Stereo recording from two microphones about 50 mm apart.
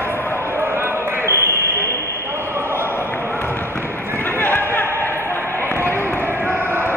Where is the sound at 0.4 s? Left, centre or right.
Right.